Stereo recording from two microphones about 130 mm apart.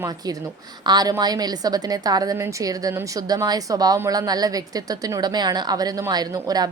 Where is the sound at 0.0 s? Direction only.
30° right (ahead or behind).